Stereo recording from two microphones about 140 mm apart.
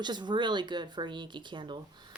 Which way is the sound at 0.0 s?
30° right (ahead or behind).